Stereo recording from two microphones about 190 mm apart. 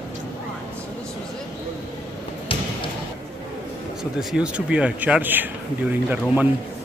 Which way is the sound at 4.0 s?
Centre (ahead or behind).